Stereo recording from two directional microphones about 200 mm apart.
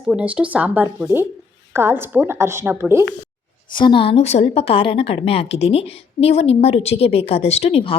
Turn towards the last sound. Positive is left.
turn(degrees=30)  # may be behind; listen again after turning